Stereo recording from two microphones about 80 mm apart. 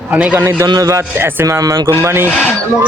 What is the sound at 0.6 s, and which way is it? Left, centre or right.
Speech, right.